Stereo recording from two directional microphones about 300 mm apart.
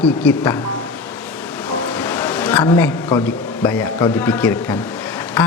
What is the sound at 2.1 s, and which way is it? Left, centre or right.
A man's voice, centre.